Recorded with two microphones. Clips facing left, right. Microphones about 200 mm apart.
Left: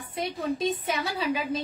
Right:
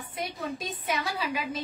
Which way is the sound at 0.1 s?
25° left (ahead or behind).